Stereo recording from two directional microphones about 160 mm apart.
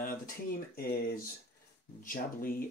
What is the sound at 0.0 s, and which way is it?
Speech, 65° left (ahead or behind).